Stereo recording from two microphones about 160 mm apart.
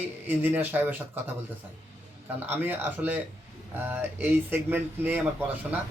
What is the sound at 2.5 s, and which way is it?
Speech, 10° right (ahead or behind).